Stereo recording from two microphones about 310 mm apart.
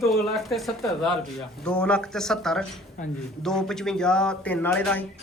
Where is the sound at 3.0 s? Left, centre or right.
Left.